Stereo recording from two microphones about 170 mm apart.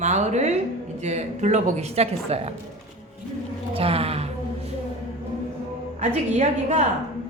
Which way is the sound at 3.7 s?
35° right (ahead or behind).